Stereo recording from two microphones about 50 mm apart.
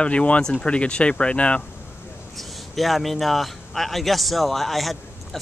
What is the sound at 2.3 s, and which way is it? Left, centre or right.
Speech, centre.